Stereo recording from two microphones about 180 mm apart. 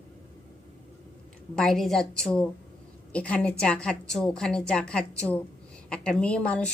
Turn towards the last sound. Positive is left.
turn(degrees=5)  # may be behind; listen again after turning